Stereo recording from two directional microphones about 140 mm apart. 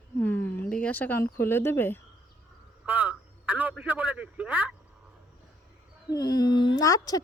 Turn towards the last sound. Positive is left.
turn(degrees=25)  # may be behind; listen again after turning